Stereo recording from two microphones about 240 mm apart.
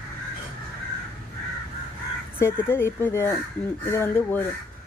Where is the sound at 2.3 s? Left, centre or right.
Centre.